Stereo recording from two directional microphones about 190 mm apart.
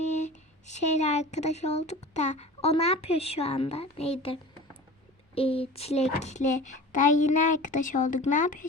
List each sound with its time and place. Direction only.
0.0 s speech: 35° left (ahead or behind)